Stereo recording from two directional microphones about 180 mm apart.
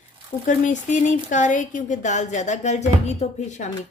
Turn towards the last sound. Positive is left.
turn(degrees=40)  # may be behind; listen again after turning